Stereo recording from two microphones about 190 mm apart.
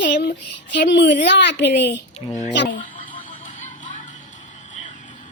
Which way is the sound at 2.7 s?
45° left (ahead or behind).